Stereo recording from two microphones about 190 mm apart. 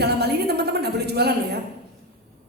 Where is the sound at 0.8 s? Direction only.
60° right (ahead or behind).